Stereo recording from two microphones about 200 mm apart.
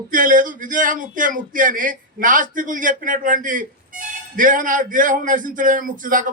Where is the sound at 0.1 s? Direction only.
40° right (ahead or behind).